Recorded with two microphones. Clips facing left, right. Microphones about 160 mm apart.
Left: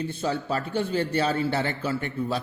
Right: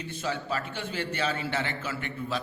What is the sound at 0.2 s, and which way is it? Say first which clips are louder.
A man's voice: left 2 dB; 35° left (ahead or behind).